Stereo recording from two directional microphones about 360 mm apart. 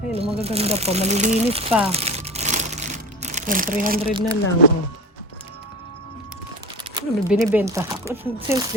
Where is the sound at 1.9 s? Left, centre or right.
Centre.